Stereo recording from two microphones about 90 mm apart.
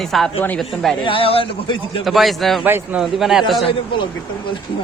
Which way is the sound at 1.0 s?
85° left.